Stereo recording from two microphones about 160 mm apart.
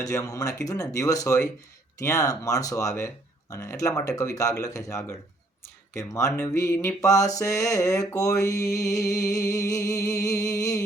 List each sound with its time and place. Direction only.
0.0 s mantra: 20° left (ahead or behind)
5.6 s speech: 15° left (ahead or behind)
7.3 s mantra: 20° left (ahead or behind)